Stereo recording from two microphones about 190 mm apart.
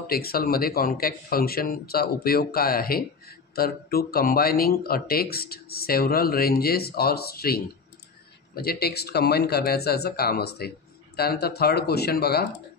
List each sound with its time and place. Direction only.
0.0 s speech: 55° left (ahead or behind)